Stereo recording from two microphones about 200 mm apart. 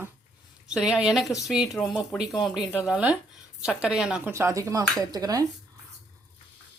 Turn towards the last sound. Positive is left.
turn(degrees=-20)  # may be behind; listen again after turning